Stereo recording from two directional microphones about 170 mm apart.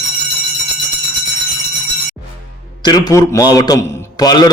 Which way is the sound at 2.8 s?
20° left (ahead or behind).